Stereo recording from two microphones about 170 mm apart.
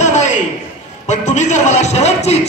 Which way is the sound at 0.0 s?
45° left (ahead or behind).